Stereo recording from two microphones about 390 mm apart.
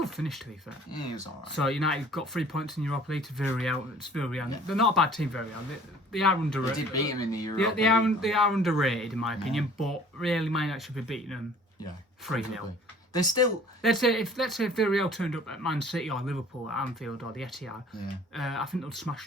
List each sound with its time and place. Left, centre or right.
0.0 s speech: centre
1.5 s speech: centre
13.1 s speech: centre